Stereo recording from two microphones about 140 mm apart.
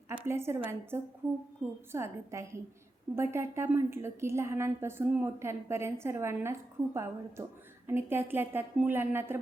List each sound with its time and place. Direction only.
0.1 s a woman's voice: 20° right (ahead or behind)